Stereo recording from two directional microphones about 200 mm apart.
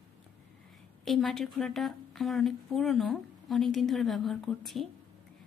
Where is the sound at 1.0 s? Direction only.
Centre (ahead or behind).